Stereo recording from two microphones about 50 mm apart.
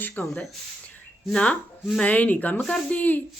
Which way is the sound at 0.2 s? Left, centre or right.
Left.